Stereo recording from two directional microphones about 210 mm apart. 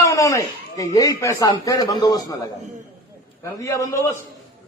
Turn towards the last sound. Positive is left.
turn(degrees=15)  # may be behind; listen again after turning